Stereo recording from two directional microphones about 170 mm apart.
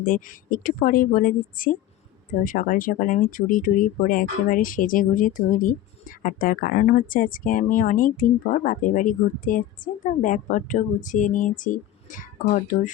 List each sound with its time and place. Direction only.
0.0 s speech: 50° left (ahead or behind)